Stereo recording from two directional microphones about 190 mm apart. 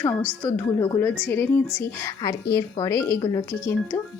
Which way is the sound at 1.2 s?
10° left (ahead or behind).